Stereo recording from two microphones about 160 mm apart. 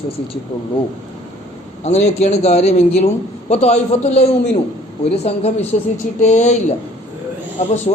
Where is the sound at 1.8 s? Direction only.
40° left (ahead or behind).